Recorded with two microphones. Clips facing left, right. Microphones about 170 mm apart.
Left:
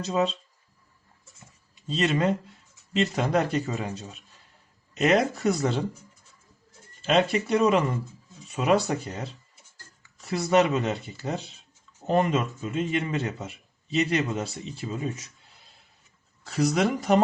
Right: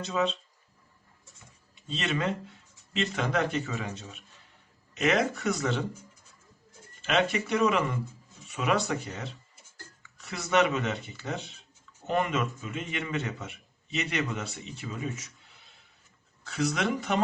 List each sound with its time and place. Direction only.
0.0 s speech: 35° left (ahead or behind)
1.9 s speech: 40° left (ahead or behind)
7.0 s speech: 35° left (ahead or behind)
16.4 s speech: 40° left (ahead or behind)